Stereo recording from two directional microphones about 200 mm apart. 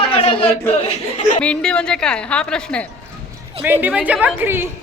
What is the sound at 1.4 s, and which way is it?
A woman's voice, 5° left (ahead or behind).